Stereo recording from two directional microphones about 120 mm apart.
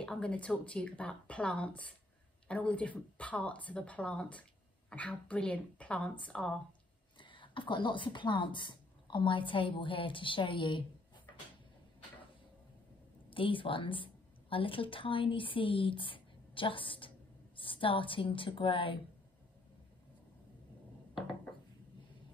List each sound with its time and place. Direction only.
0.0 s speech: 10° left (ahead or behind)
7.2 s a woman's voice: 45° left (ahead or behind)
13.3 s a woman's voice: 45° left (ahead or behind)